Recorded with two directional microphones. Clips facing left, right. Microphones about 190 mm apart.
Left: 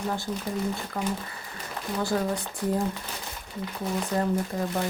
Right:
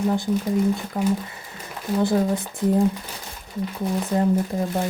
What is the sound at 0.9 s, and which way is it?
Speech, 15° right (ahead or behind).